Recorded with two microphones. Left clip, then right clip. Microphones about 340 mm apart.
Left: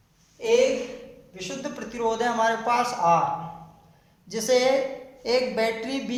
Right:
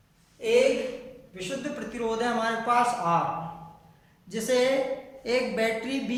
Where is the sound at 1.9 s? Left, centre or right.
Centre.